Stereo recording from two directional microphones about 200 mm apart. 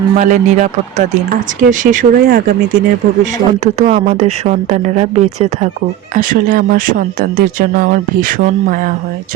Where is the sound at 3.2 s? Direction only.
35° right (ahead or behind).